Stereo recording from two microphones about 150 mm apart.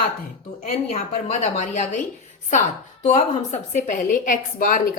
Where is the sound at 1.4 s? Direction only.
50° left (ahead or behind).